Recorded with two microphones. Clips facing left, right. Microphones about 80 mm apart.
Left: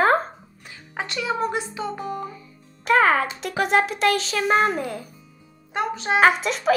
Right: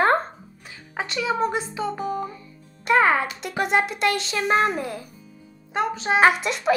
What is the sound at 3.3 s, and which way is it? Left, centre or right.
A child's voice, centre.